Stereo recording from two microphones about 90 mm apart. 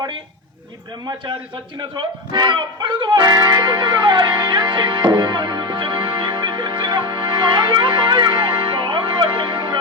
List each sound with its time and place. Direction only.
1.8 s music: 55° right (ahead or behind)